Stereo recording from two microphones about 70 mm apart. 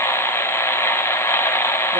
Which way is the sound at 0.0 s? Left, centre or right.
Left.